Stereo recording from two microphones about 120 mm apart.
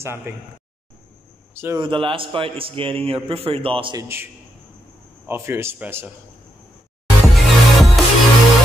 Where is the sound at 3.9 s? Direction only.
20° right (ahead or behind).